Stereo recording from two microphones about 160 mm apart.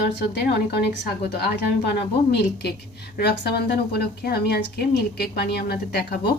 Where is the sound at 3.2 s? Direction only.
90° left.